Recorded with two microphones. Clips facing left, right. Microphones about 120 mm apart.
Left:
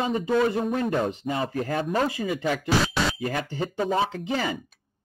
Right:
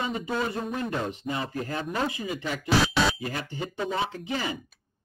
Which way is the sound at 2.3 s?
55° left (ahead or behind).